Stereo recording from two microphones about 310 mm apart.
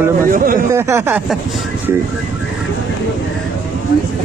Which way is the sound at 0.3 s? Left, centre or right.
Right.